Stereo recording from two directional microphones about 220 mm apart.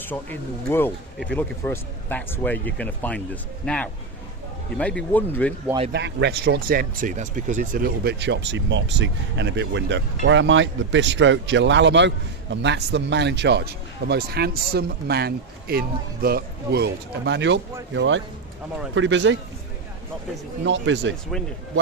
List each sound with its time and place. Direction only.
0.1 s speech: 10° left (ahead or behind)
4.8 s speech: 5° left (ahead or behind)
5.9 s speech: 50° right (ahead or behind)
20.7 s speech: 55° right (ahead or behind)